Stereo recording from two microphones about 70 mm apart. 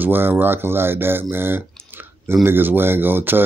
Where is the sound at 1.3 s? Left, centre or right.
Right.